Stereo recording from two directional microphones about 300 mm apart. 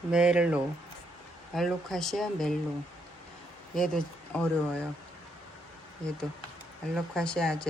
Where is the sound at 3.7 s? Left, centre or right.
Centre.